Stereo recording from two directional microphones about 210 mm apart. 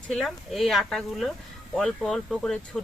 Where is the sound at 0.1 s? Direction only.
Centre (ahead or behind).